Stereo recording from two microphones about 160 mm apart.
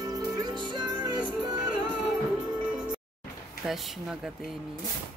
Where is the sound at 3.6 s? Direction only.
Centre (ahead or behind).